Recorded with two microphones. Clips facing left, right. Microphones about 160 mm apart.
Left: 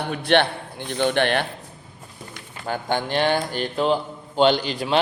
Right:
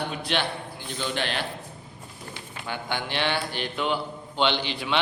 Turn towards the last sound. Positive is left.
turn(degrees=40)  # may be behind; listen again after turning